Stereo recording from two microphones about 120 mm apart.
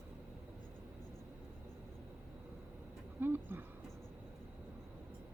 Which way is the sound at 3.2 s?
15° right (ahead or behind).